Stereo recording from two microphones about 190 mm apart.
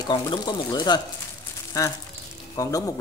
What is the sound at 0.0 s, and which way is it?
Speech, 25° left (ahead or behind).